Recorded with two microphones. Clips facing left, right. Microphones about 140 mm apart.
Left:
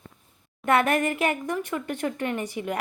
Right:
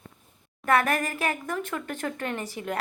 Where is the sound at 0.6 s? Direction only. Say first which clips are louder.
Left 2 dB; 25° left (ahead or behind).